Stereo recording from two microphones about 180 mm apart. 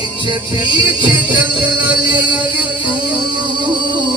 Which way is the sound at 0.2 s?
25° right (ahead or behind).